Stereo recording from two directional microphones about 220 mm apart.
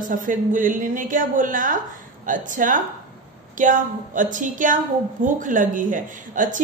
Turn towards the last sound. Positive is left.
turn(degrees=-35)  # may be behind; listen again after turning